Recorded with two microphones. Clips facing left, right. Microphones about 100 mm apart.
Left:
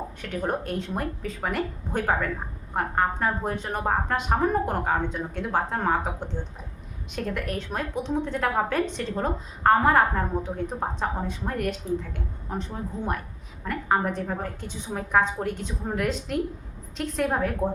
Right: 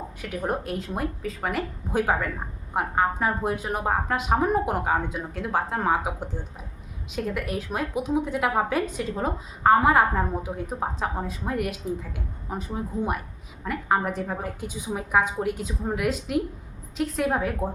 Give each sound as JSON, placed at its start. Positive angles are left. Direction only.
{"t": 0.2, "sound": "a woman's voice", "side_deg": -5}